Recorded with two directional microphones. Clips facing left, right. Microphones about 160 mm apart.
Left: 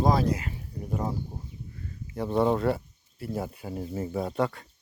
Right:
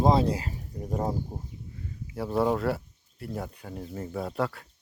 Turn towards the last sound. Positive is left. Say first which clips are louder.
# left 2 dB
turn(degrees=0)  # may be behind; listen again after turning